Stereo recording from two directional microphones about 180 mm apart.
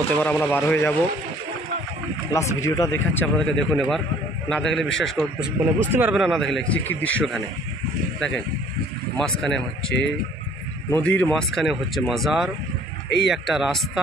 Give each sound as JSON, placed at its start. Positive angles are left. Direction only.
{"t": 0.1, "sound": "speech", "side_deg": 10}
{"t": 2.3, "sound": "speech", "side_deg": 15}
{"t": 3.3, "sound": "a man's voice", "side_deg": 0}
{"t": 9.1, "sound": "a man's voice", "side_deg": 5}
{"t": 10.9, "sound": "a man's voice", "side_deg": 10}